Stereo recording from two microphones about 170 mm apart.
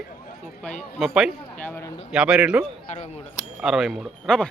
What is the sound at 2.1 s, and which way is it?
Speech, 5° right (ahead or behind).